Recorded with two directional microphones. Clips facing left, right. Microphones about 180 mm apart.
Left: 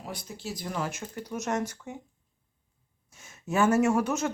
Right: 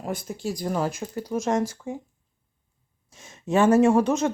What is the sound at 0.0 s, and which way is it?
Speech, 50° right (ahead or behind).